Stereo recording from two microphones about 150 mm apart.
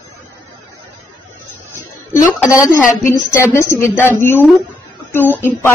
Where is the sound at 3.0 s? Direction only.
15° left (ahead or behind).